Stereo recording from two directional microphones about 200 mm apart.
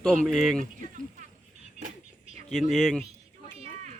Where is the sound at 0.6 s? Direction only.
40° right (ahead or behind).